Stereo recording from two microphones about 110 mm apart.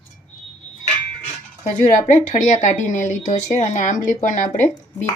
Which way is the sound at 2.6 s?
90° left.